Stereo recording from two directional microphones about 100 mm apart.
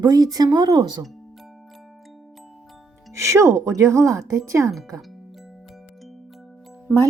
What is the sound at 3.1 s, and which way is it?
Speech, 30° right (ahead or behind).